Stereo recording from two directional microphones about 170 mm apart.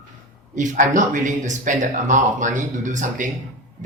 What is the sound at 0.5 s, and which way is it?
Speech, 45° right (ahead or behind).